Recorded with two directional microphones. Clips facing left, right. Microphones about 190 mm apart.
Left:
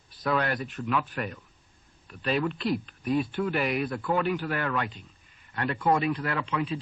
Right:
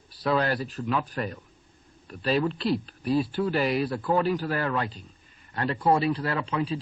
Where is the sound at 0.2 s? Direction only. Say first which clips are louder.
Right 2 dB; 30° right (ahead or behind).